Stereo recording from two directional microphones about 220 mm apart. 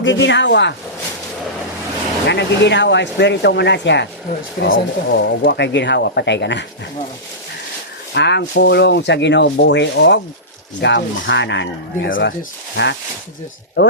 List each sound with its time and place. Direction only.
0.0 s speech: 55° left (ahead or behind)
2.2 s speech: 50° left (ahead or behind)
8.1 s speech: 50° left (ahead or behind)